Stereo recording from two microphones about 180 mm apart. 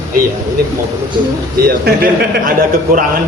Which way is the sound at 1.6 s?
55° right (ahead or behind).